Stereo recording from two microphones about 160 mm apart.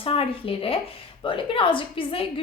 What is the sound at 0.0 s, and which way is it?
A woman's voice, 35° left (ahead or behind).